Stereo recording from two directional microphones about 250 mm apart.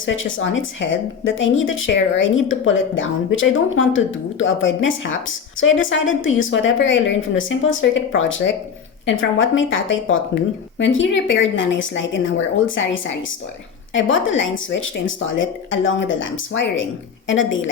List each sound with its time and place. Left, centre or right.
0.0 s speech: left